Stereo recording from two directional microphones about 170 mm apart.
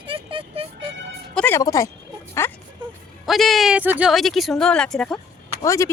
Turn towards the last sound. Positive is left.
turn(degrees=20)  # may be behind; listen again after turning